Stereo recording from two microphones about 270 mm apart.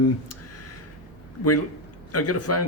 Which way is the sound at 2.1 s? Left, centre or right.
Left.